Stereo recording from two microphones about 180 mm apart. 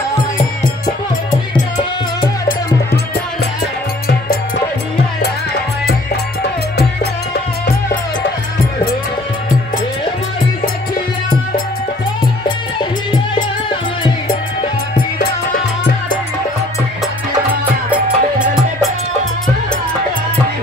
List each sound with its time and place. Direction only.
0.4 s music: 50° left (ahead or behind)
17.9 s music: 5° right (ahead or behind)